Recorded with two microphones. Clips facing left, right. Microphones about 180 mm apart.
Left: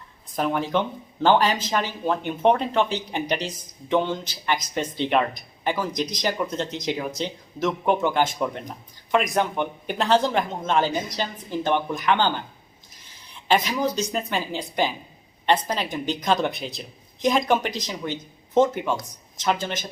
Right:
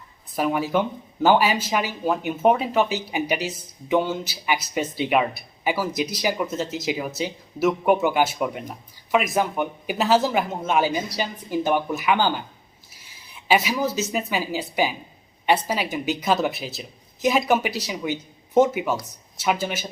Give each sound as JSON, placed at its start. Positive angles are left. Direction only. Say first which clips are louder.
{"t": 0.3, "sound": "speech", "louder": "right 1 dB", "side_deg": -5}